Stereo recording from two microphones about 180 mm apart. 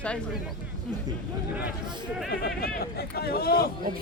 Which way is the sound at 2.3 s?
65° left (ahead or behind).